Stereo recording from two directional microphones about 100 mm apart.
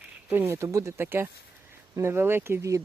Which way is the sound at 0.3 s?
20° right (ahead or behind).